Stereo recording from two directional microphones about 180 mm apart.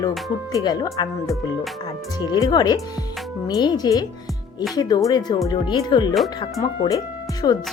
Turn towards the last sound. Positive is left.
turn(degrees=20)  # may be behind; listen again after turning